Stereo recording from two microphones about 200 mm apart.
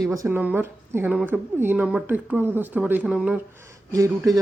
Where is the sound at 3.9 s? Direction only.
15° right (ahead or behind).